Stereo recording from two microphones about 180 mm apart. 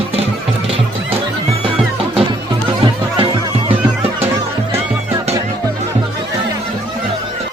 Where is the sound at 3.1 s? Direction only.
30° right (ahead or behind).